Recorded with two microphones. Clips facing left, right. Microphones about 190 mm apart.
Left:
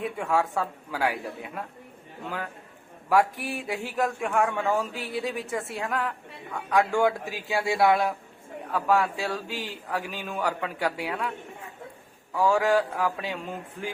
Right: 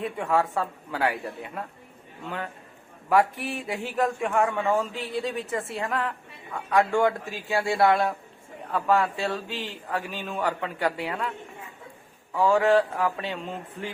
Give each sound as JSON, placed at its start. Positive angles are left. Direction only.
{"t": 0.0, "sound": "a man's voice", "side_deg": 0}
{"t": 3.1, "sound": "a man's voice", "side_deg": 0}
{"t": 12.3, "sound": "a man's voice", "side_deg": 0}